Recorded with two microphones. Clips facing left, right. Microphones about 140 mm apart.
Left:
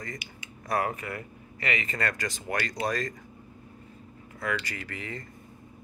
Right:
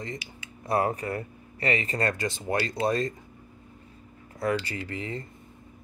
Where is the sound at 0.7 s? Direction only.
30° right (ahead or behind).